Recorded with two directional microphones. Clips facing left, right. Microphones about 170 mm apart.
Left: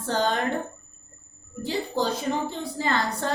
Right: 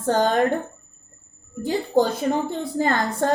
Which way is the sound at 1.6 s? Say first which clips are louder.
Right 6 dB; 50° right (ahead or behind).